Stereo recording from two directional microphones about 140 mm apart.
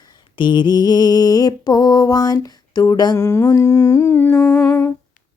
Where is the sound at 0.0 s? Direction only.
30° left (ahead or behind); by 4.9 s 10° left (ahead or behind).